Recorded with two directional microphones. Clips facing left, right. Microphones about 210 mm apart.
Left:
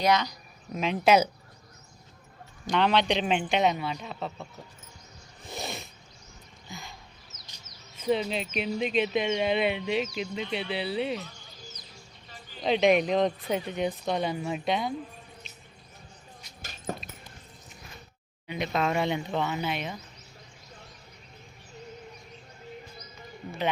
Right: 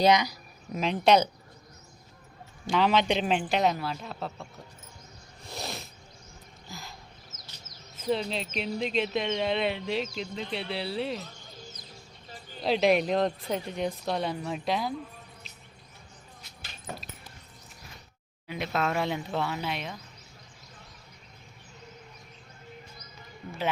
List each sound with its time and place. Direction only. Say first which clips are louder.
0.1 s speech: right 2 dB; 10° right (ahead or behind)
2.6 s speech: even; 5° right (ahead or behind)
5.4 s zipper: left 1 dB; centre (ahead or behind)
6.7 s a sound: left 1 dB; centre (ahead or behind)
7.3 s bird: right 2 dB; 50° right (ahead or behind)
7.9 s speech: left 2 dB; centre (ahead or behind)
12.6 s speech: left 1 dB; centre (ahead or behind)
16.9 s a sound: left 5 dB; 40° left (ahead or behind)
18.4 s speech: left 1 dB; centre (ahead or behind)